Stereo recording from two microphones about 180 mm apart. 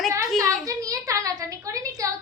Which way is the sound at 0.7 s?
20° right (ahead or behind).